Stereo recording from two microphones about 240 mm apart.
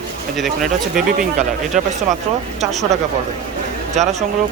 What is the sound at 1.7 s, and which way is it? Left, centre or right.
Speech, right.